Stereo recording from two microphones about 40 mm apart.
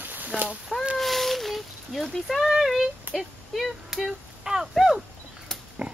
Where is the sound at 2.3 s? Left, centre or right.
Centre.